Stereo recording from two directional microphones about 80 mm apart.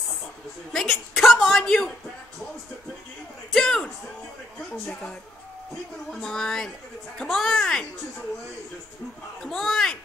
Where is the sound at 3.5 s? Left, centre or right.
Centre.